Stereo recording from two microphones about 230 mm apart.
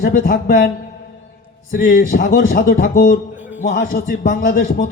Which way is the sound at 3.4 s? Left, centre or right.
Centre.